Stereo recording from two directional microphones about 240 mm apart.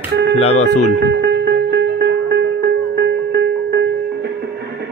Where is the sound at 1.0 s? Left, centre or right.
Right.